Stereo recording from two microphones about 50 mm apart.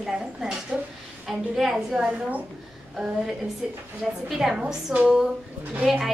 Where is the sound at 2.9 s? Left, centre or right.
Centre.